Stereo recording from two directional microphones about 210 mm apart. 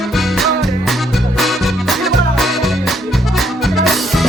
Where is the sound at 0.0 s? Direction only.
Centre (ahead or behind).